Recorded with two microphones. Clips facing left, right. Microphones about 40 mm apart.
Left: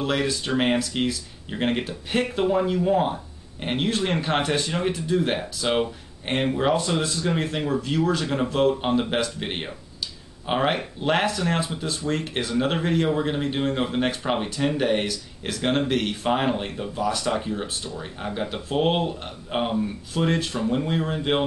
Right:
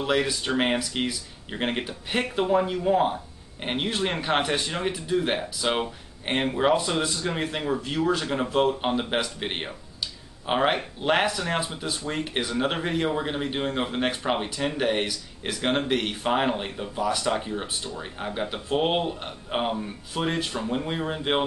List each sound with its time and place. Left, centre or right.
0.0 s speech: centre